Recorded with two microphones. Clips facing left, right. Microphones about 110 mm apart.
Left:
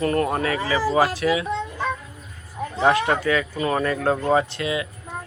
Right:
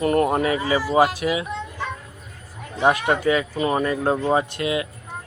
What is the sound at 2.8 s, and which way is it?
Speech, 20° right (ahead or behind).